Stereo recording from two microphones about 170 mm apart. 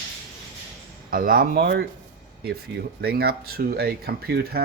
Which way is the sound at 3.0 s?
65° right (ahead or behind).